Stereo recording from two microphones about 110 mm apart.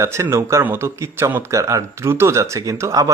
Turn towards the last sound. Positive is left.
turn(degrees=-30)  # may be behind; listen again after turning